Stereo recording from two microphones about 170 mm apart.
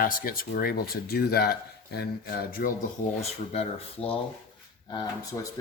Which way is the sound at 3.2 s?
35° left (ahead or behind).